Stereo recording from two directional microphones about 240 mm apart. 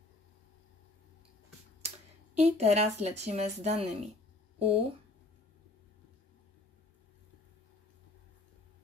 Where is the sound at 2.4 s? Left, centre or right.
Right.